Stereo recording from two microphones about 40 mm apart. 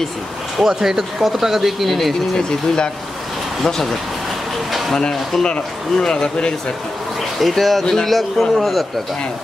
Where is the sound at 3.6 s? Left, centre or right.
Centre.